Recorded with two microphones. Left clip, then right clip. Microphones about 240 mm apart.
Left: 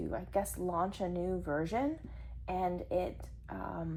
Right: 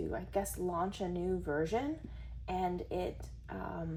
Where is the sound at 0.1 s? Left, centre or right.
Left.